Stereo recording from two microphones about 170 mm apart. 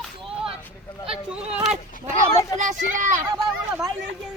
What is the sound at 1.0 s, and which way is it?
Speech, 5° right (ahead or behind).